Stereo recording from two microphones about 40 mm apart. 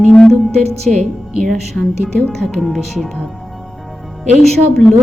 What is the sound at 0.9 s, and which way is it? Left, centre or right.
Speech, centre.